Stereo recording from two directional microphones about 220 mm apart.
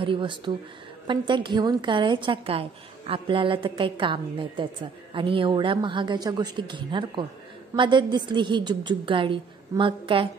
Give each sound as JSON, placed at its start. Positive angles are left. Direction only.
{"t": 0.0, "sound": "a woman's voice", "side_deg": -20}